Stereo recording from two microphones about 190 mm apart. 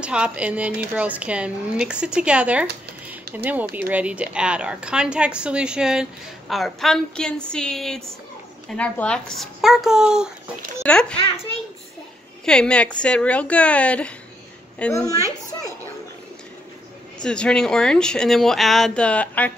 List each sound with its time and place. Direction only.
0.0 s speech: 5° right (ahead or behind)
3.3 s a sound: 55° right (ahead or behind)
3.9 s speech: 5° right (ahead or behind)
12.4 s a woman's voice: 5° left (ahead or behind)
17.2 s speech: 5° left (ahead or behind)